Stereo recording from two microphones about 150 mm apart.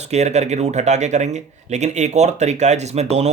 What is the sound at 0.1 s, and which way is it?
Speech, 45° right (ahead or behind).